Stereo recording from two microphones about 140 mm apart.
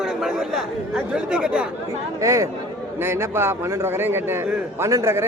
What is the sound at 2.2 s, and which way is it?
A man's voice, 20° right (ahead or behind).